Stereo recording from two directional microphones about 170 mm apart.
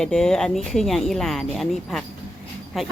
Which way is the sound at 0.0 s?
5° left (ahead or behind).